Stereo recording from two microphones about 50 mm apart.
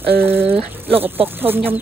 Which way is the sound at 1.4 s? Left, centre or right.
Right.